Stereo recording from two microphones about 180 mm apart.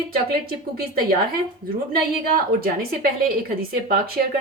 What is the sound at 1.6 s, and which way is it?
A woman's voice, 60° right (ahead or behind).